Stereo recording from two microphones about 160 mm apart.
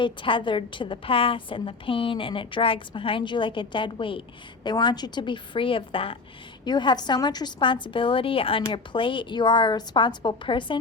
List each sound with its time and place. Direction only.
0.0 s a woman's voice: 30° left (ahead or behind)